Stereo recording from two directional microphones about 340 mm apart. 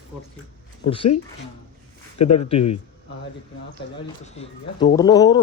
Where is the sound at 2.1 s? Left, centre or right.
Left.